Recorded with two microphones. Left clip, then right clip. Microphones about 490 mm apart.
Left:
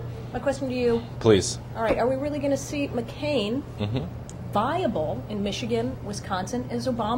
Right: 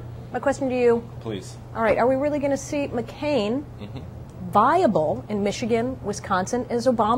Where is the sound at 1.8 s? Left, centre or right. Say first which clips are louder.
Right 4 dB; right.